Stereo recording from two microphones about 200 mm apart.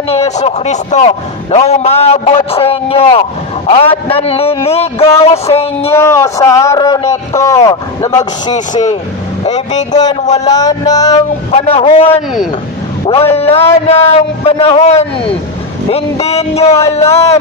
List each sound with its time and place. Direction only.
0.2 s a man's voice: 35° left (ahead or behind)
5.9 s a man's voice: 15° left (ahead or behind)
10.4 s a man's voice: 20° left (ahead or behind)